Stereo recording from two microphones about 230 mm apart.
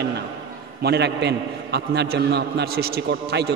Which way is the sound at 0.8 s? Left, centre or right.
Right.